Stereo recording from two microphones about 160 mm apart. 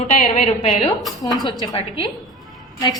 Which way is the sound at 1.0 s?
Centre (ahead or behind).